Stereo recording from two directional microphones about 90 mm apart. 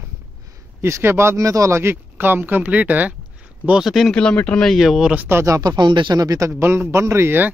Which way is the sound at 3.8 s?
Centre (ahead or behind).